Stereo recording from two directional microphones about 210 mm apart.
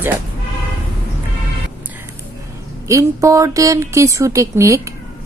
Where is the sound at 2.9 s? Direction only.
15° right (ahead or behind).